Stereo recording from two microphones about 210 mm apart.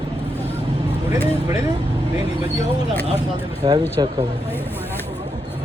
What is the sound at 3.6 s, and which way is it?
Speech, 20° right (ahead or behind).